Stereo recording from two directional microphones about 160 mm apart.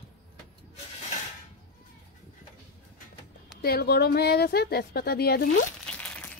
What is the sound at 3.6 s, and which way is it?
A woman's voice, 80° left.